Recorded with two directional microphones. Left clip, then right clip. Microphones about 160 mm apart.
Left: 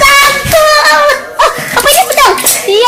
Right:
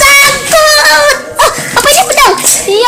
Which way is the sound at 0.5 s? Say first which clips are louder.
Right 1 dB; 25° right (ahead or behind).